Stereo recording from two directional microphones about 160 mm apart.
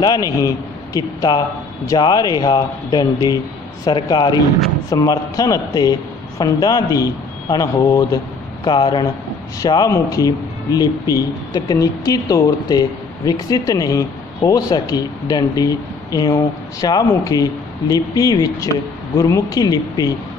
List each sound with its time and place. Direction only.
0.0 s speech: 25° left (ahead or behind)